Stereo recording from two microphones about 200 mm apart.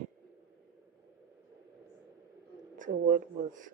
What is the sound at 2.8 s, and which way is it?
Speech, 40° right (ahead or behind).